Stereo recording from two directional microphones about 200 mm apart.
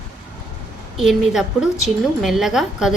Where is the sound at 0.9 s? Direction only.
Centre (ahead or behind).